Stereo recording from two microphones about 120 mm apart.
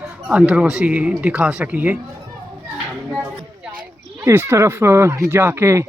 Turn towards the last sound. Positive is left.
turn(degrees=-20)  # may be behind; listen again after turning